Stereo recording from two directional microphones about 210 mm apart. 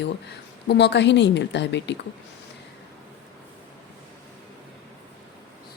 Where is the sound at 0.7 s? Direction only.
55° left (ahead or behind).